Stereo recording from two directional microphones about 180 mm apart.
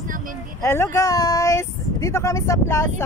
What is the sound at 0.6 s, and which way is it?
Speech, 15° left (ahead or behind).